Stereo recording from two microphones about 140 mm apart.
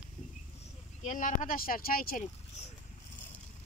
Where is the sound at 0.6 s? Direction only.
65° left (ahead or behind); by 2.3 s 90° left.